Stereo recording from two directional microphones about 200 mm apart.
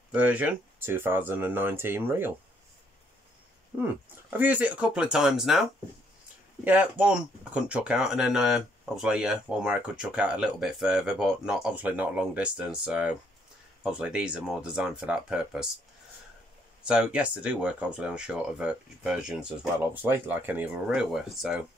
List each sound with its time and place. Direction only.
0.1 s speech: 5° right (ahead or behind)
3.8 s speech: 10° right (ahead or behind)
16.8 s speech: 5° right (ahead or behind)